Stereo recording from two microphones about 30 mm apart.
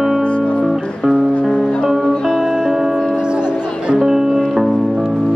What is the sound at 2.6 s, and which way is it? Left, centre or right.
Music, centre.